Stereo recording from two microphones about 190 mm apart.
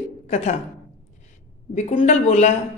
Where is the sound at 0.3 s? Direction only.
35° left (ahead or behind).